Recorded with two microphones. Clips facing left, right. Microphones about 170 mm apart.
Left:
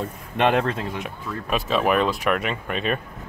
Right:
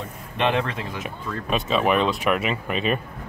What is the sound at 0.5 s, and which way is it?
Speech, 45° left (ahead or behind).